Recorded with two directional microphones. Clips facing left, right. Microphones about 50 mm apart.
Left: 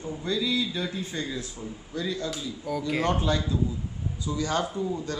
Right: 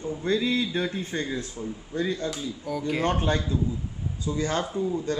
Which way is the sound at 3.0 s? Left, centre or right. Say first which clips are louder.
Right 1 dB; right.